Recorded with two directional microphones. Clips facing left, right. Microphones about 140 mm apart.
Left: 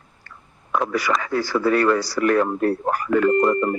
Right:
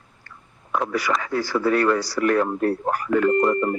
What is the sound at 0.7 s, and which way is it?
Speech, 90° left.